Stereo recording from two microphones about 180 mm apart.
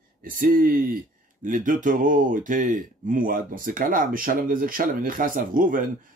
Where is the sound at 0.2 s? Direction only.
50° right (ahead or behind).